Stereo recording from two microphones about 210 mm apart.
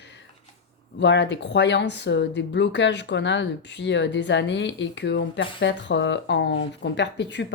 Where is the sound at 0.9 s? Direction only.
55° left (ahead or behind).